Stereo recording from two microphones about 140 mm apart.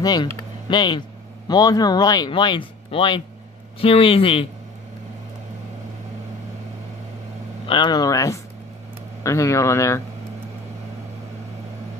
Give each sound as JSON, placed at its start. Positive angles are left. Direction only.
{"t": 0.0, "sound": "a man's voice", "side_deg": 30}
{"t": 7.6, "sound": "speech", "side_deg": 35}